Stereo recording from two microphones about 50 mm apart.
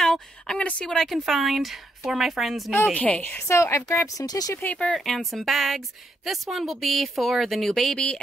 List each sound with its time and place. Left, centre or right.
0.0 s a sound: centre
0.6 s speech: left
0.8 s speech: centre
1.1 s a woman's voice: centre
2.9 s a woman's voice: left
3.4 s speech: left
4.6 s speech: left
4.9 s a woman's voice: centre